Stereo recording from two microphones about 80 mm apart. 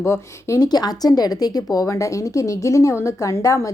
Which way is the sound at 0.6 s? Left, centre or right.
Left.